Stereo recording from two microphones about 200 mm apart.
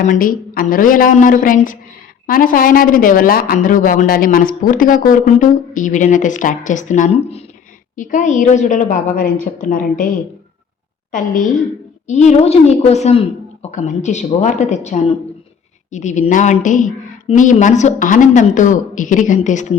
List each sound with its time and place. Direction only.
0.0 s a woman's voice: 40° left (ahead or behind)
11.1 s a woman's voice: 40° left (ahead or behind)